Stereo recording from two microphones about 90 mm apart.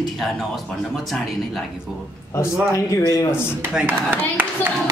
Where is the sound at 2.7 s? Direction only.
40° left (ahead or behind).